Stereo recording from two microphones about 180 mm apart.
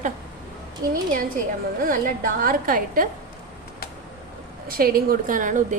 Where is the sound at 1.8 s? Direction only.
50° right (ahead or behind).